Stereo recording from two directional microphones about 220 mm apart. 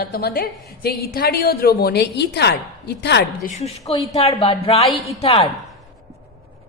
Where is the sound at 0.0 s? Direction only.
45° left (ahead or behind).